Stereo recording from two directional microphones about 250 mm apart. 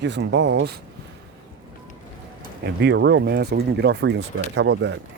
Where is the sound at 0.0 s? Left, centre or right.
Right.